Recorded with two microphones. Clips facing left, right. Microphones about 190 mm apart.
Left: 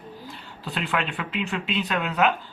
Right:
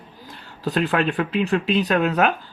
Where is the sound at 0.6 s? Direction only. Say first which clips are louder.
Right 7 dB; 40° right (ahead or behind).